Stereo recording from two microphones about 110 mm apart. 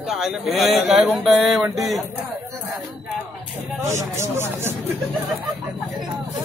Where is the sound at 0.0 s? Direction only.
5° right (ahead or behind).